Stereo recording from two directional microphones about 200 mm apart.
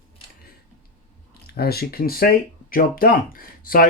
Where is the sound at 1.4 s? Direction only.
50° left (ahead or behind).